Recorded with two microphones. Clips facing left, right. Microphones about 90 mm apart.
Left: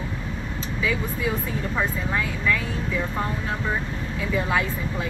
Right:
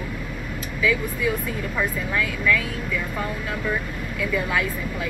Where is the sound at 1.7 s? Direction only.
30° left (ahead or behind).